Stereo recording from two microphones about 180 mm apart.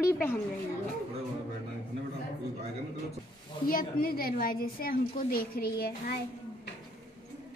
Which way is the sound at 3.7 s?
50° left (ahead or behind).